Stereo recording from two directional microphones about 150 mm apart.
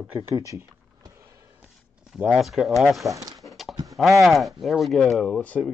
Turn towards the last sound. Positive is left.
turn(degrees=10)  # may be behind; listen again after turning